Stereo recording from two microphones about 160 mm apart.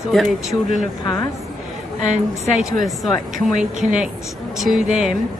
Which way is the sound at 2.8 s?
Centre (ahead or behind).